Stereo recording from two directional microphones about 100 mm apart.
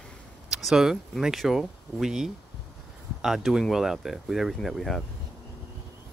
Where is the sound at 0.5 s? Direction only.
5° right (ahead or behind).